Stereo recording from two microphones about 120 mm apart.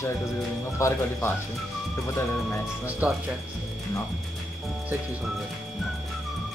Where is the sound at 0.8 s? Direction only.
20° left (ahead or behind).